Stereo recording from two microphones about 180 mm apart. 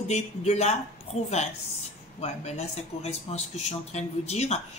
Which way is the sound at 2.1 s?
35° left (ahead or behind).